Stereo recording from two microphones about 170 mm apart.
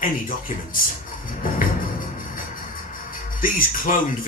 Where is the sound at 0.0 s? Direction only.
55° left (ahead or behind).